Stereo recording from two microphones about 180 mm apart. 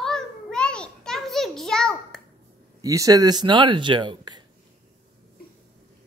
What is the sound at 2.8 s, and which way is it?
Speech, 20° right (ahead or behind).